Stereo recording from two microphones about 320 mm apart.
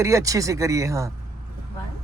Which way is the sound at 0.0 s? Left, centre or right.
Centre.